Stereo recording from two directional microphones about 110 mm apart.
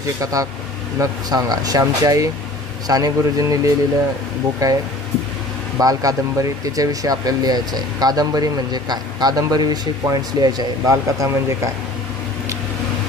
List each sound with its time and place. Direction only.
0.2 s speech: 30° right (ahead or behind)